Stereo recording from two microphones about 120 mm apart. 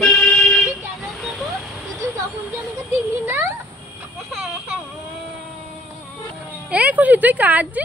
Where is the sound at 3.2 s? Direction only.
20° right (ahead or behind).